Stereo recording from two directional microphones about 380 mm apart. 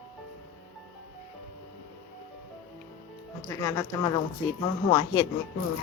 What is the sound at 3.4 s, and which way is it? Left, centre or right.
A woman's voice, centre.